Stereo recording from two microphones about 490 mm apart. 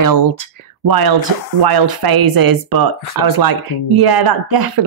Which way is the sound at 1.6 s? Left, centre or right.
Right.